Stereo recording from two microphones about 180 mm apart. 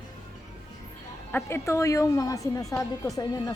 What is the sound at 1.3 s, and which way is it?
A woman's voice, 15° left (ahead or behind).